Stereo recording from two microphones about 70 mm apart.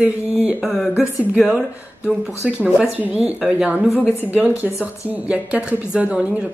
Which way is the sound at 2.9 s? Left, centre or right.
Right.